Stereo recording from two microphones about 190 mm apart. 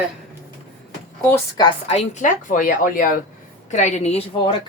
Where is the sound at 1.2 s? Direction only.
20° left (ahead or behind).